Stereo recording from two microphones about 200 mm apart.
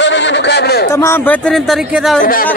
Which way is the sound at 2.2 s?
45° left (ahead or behind).